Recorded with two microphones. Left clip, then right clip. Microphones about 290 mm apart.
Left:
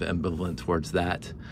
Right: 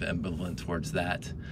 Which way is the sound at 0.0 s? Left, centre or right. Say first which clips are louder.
Left 4 dB; centre.